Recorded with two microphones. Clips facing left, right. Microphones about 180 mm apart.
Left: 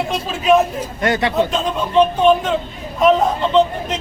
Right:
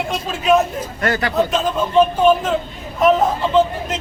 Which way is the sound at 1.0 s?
20° left (ahead or behind).